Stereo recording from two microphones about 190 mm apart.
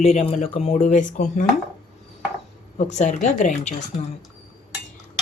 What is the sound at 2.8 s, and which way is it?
Speech, 40° left (ahead or behind).